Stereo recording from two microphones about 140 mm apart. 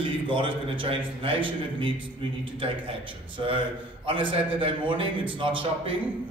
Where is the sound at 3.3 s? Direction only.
40° right (ahead or behind).